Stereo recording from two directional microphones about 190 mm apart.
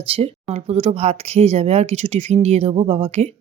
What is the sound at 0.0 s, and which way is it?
Speech, 30° right (ahead or behind).